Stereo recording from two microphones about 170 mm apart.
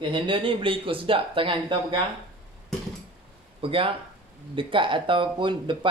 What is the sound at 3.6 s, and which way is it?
Speech, 30° right (ahead or behind).